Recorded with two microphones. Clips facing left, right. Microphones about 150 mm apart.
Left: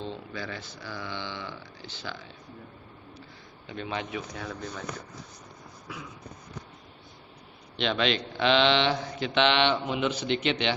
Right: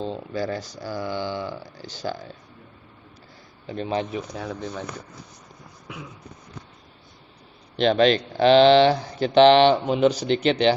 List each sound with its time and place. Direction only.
0.0 s speech: 40° right (ahead or behind)
3.7 s speech: 35° right (ahead or behind)
7.8 s speech: 40° right (ahead or behind)